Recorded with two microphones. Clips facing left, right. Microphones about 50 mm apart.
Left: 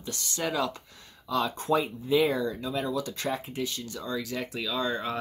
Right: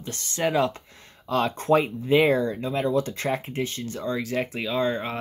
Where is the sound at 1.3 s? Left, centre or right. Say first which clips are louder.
Right 5 dB; right.